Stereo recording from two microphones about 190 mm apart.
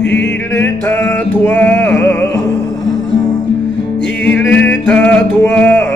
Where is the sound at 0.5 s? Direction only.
10° left (ahead or behind).